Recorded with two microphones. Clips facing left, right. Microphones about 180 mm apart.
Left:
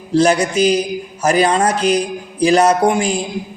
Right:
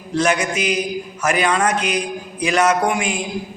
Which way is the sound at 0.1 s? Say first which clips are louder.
Left 5 dB; 35° left (ahead or behind).